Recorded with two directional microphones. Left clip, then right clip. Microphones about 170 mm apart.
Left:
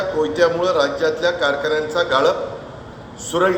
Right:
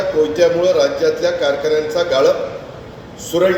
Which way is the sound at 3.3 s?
10° left (ahead or behind).